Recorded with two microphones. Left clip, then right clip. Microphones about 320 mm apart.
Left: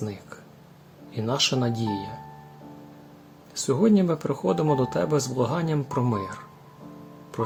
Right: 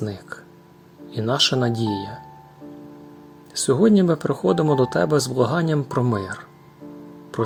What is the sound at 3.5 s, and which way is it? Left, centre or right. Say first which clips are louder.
Speech: right 5 dB; centre.